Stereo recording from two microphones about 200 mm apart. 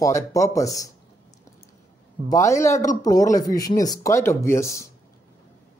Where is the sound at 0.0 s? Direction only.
15° left (ahead or behind).